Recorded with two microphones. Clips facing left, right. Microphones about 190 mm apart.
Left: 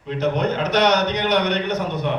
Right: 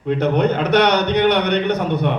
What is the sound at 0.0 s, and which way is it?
A man's voice, 60° right (ahead or behind).